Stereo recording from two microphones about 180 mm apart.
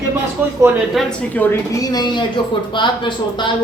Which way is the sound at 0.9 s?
10° left (ahead or behind).